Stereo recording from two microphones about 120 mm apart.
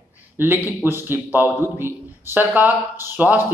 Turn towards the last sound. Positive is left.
turn(degrees=-15)  # may be behind; listen again after turning